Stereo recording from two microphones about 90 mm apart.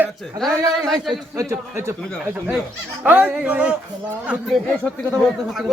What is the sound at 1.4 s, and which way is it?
Speech, 30° right (ahead or behind).